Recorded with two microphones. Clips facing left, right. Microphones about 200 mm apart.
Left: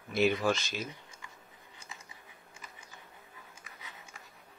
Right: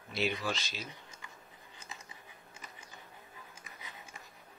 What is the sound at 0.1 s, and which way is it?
Speech, 50° left (ahead or behind).